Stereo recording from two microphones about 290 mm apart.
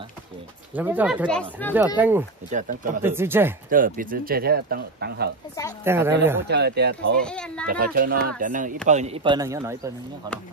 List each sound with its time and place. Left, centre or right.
0.7 s speech: centre
2.0 s a man's voice: centre
2.5 s speech: right
3.0 s a man's voice: centre
3.7 s speech: right
5.9 s a man's voice: centre
6.4 s speech: right
7.2 s a child's voice: centre
7.6 s a man's voice: right; by 9.8 s centre